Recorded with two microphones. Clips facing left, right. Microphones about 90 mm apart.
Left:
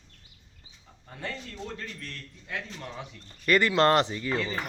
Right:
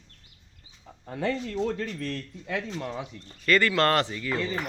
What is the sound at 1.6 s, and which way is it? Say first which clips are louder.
Speech: right 8 dB; 80° right.